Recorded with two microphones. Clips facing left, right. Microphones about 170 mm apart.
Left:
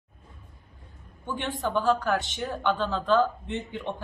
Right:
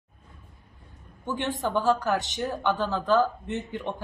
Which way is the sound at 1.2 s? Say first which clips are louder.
Right 2 dB; 20° right (ahead or behind).